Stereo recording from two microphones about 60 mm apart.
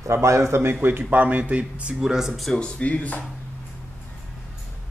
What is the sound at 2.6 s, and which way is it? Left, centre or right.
Speech, left.